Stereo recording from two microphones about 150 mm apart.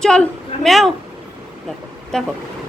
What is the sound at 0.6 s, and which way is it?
Speech, centre (ahead or behind).